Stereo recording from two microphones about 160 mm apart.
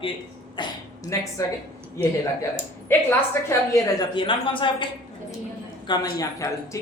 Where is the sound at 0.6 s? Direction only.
30° left (ahead or behind).